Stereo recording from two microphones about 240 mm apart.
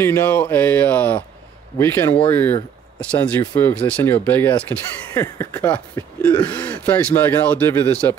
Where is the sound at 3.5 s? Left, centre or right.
Centre.